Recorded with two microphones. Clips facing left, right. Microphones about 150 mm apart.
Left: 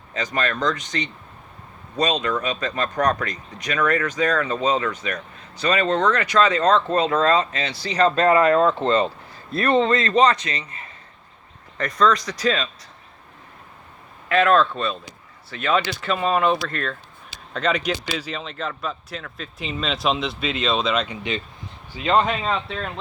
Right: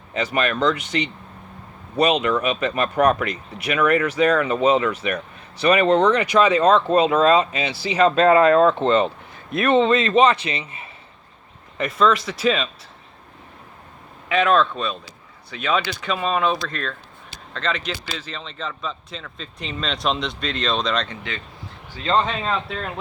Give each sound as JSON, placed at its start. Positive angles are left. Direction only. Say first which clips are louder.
{"t": 0.1, "sound": "speech", "louder": "right 3 dB", "side_deg": -10}
{"t": 8.0, "sound": "speech", "louder": "right 2 dB", "side_deg": -20}
{"t": 11.8, "sound": "speech", "louder": "right 1 dB", "side_deg": -5}
{"t": 14.3, "sound": "a man's voice", "louder": "left 1 dB", "side_deg": 0}